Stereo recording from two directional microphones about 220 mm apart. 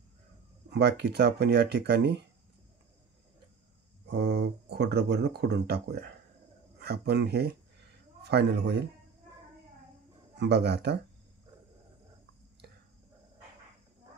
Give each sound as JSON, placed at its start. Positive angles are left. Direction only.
{"t": 0.7, "sound": "speech", "side_deg": -50}
{"t": 4.1, "sound": "speech", "side_deg": -50}
{"t": 10.3, "sound": "speech", "side_deg": -50}